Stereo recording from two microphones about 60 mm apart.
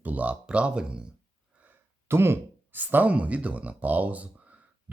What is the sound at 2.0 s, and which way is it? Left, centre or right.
Speech, right.